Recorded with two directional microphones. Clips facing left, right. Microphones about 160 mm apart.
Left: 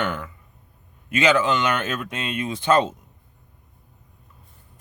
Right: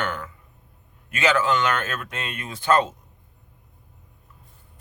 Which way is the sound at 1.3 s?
20° left (ahead or behind).